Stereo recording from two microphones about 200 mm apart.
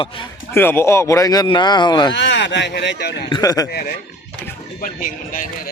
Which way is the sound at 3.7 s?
55° left (ahead or behind).